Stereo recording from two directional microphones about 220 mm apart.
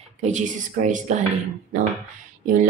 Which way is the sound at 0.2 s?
35° right (ahead or behind).